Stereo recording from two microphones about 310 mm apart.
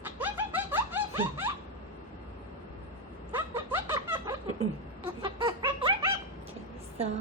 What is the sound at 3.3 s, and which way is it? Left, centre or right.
Snicker, centre.